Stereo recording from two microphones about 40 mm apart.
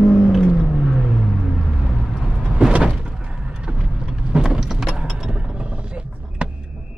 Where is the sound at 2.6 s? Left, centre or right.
Right.